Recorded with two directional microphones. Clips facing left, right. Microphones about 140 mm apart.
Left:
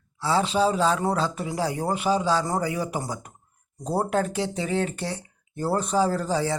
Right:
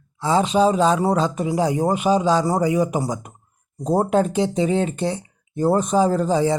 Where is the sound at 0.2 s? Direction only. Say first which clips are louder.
Right 5 dB; 20° right (ahead or behind).